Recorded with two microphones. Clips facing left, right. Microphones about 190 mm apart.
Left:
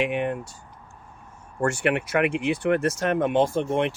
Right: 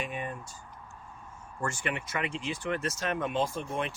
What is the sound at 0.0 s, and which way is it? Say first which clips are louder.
Speech: left 11 dB; 75° left (ahead or behind).